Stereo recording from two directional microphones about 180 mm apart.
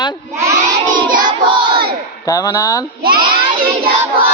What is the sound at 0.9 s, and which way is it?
Crowd, 50° right (ahead or behind).